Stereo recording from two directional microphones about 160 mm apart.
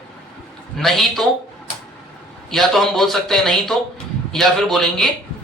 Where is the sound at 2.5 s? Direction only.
Centre (ahead or behind).